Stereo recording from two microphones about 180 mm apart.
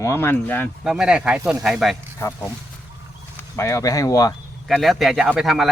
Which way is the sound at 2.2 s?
15° left (ahead or behind).